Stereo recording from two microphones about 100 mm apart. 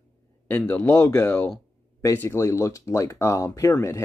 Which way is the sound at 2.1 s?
25° left (ahead or behind).